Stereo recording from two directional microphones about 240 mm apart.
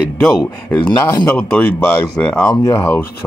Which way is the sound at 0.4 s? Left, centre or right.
Centre.